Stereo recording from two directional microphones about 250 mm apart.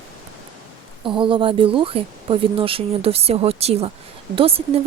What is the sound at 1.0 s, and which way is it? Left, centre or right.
Speech, centre.